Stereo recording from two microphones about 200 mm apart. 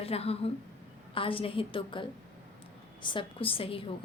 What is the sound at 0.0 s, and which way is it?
A woman's voice, 30° left (ahead or behind).